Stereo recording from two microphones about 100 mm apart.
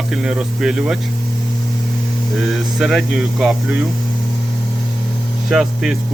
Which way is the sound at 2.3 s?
Centre (ahead or behind).